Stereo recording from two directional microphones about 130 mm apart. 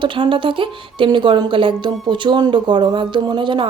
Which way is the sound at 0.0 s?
40° right (ahead or behind).